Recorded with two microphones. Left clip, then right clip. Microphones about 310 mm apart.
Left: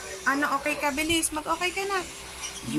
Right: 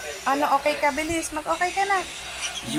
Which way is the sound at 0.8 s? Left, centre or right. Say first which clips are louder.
Right 2 dB; centre.